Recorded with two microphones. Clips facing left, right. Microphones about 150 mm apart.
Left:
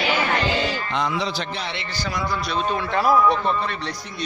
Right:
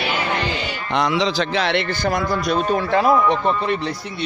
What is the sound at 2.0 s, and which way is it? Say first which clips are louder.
Speech: right 1 dB; 50° right (ahead or behind).